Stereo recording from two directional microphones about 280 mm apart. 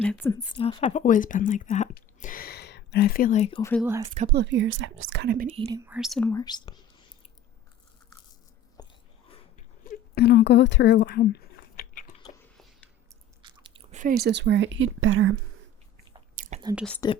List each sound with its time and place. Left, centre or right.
0.0 s speech: centre
0.5 s speech: centre
3.6 s speech: centre
3.8 s speech: centre
4.1 s speech: right
5.5 s speech: centre
8.8 s a sound: centre
9.8 s a sound: left
13.4 s speech: centre; by 15.4 s right
16.3 s chewing: right
16.7 s speech: centre